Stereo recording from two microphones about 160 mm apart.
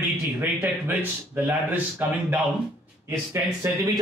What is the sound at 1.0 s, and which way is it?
Speech, 10° right (ahead or behind).